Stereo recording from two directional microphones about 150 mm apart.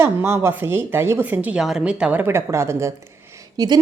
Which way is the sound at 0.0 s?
15° right (ahead or behind).